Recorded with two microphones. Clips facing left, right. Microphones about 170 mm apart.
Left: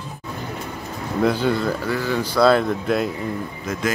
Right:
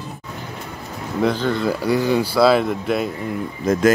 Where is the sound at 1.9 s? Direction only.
15° right (ahead or behind).